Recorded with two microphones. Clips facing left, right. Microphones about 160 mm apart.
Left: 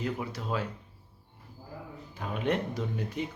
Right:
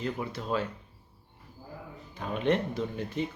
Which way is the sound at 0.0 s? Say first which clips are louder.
Even; 5° left (ahead or behind).